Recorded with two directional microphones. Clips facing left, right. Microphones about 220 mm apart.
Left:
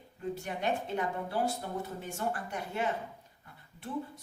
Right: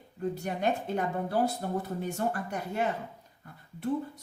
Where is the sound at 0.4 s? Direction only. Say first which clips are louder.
Right 3 dB; 40° right (ahead or behind).